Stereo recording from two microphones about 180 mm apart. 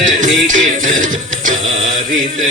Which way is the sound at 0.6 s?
45° right (ahead or behind).